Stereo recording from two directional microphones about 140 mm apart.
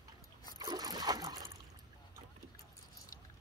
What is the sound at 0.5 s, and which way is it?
Trickle, 25° right (ahead or behind).